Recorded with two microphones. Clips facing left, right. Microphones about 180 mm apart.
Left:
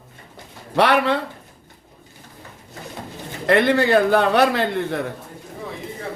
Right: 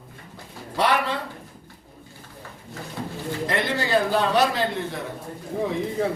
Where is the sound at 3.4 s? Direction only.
60° left (ahead or behind).